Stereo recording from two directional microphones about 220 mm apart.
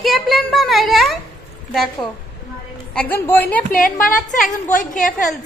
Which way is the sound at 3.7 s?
40° left (ahead or behind).